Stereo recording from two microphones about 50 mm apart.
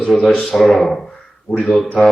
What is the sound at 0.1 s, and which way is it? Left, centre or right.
Speech, centre.